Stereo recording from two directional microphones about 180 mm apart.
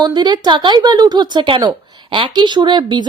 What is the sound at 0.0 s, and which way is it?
A woman's voice, 25° right (ahead or behind).